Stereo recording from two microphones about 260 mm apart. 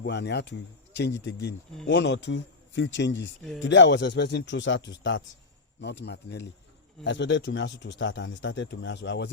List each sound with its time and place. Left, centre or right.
0.0 s speech: left